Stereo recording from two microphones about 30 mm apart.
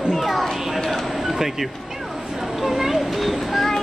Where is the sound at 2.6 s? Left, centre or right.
Centre.